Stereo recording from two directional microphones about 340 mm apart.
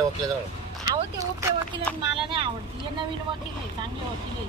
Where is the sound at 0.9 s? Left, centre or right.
Centre.